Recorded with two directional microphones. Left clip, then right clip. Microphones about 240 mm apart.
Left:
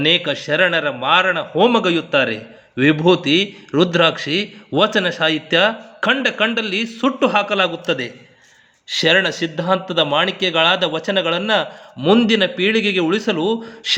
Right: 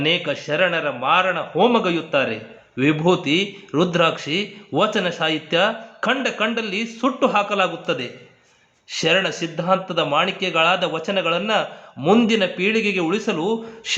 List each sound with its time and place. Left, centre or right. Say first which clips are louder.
0.0 s a man's voice: left 4 dB; left